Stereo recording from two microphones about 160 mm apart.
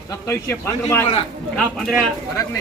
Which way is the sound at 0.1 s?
15° left (ahead or behind).